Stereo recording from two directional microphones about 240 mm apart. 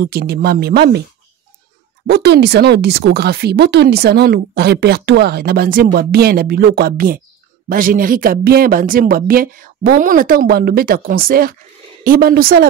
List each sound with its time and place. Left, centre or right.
0.0 s speech: right
2.0 s speech: right